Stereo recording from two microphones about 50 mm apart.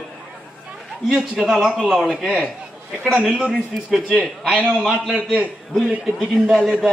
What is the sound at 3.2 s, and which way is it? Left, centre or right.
Speech, centre.